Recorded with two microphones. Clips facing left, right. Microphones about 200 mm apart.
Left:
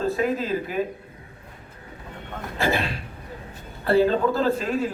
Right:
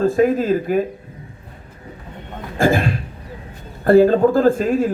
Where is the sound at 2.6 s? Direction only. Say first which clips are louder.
Right 8 dB; 50° right (ahead or behind).